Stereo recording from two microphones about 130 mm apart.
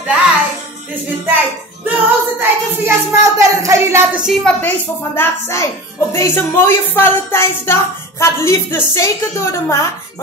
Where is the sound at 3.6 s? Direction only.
20° right (ahead or behind).